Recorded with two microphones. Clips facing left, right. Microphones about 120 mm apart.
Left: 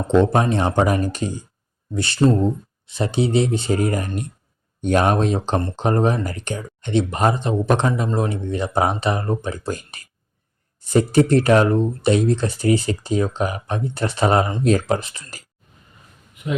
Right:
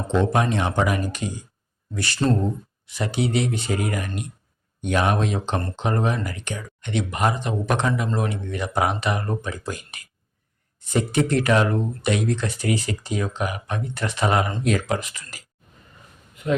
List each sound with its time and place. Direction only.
0.1 s speech: 30° left (ahead or behind)